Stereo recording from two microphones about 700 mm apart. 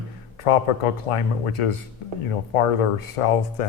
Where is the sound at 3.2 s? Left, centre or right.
Left.